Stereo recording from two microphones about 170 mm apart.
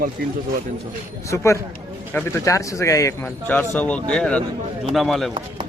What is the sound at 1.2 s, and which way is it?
Speech, 15° left (ahead or behind).